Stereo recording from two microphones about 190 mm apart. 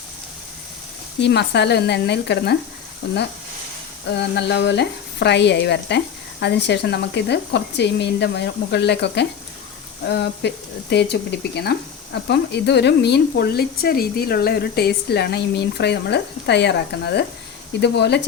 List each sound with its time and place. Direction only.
1.2 s speech: 60° left (ahead or behind)
4.1 s speech: 65° left (ahead or behind)